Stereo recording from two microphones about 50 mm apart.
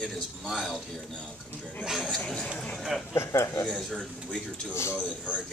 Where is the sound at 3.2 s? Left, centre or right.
Left.